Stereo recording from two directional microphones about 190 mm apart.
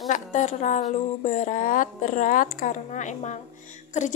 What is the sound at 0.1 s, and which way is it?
A woman's voice, 40° left (ahead or behind).